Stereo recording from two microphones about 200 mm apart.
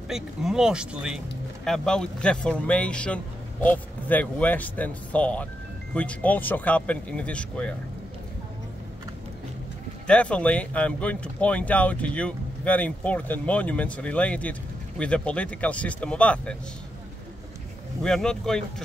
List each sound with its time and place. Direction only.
0.1 s speech: centre (ahead or behind)
10.0 s speech: 5° left (ahead or behind)
18.0 s speech: 5° left (ahead or behind)